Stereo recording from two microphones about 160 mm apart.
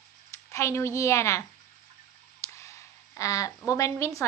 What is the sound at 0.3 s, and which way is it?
Speech, 15° left (ahead or behind).